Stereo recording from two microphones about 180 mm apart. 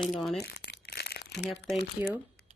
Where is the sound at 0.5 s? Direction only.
70° left (ahead or behind).